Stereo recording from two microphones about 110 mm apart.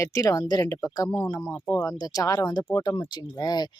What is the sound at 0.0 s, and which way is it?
Speech, 30° left (ahead or behind).